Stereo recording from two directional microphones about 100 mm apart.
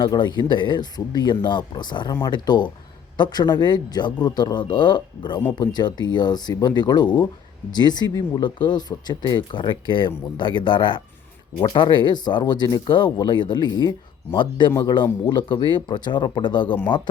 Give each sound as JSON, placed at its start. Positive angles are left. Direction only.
{"t": 0.0, "sound": "speech", "side_deg": 45}
{"t": 8.4, "sound": "speech", "side_deg": 55}
{"t": 15.3, "sound": "speech", "side_deg": 50}